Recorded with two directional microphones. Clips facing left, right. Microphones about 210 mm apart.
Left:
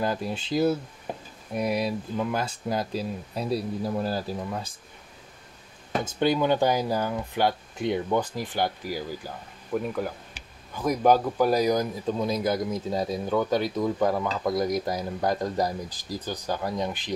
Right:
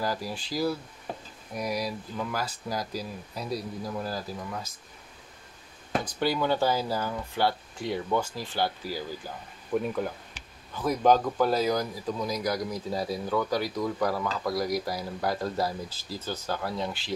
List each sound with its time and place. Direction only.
0.0 s speech: 20° left (ahead or behind)
6.0 s speech: 20° left (ahead or behind)
9.8 s speech: 5° left (ahead or behind)